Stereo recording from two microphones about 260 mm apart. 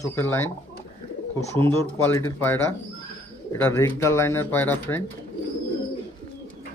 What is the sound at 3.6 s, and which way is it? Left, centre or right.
Speech, centre.